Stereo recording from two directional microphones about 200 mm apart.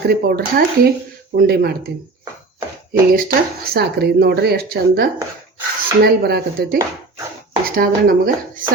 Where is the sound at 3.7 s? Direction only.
50° right (ahead or behind).